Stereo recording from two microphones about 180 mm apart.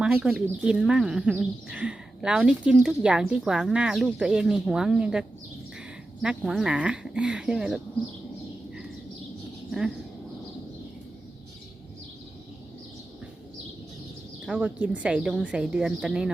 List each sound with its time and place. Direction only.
0.0 s speech: 5° right (ahead or behind)
6.2 s speech: centre (ahead or behind)
14.4 s speech: 5° right (ahead or behind)